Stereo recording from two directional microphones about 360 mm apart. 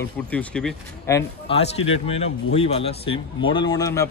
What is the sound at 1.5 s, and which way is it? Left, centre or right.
Speech, centre.